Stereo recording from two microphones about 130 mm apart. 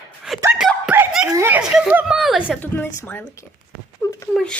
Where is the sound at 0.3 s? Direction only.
5° right (ahead or behind).